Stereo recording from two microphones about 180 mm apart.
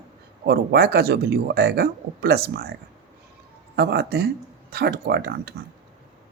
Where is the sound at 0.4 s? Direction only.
60° right (ahead or behind).